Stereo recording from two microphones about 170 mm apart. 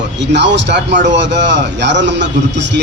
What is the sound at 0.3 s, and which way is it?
A man's voice, 90° right.